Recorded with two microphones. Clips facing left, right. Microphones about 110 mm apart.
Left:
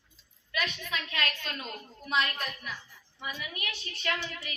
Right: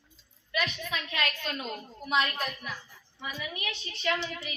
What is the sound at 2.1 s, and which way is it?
Speech, 30° right (ahead or behind).